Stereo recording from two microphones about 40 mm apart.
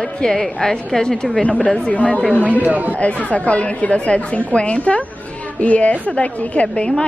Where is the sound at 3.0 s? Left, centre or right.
Left.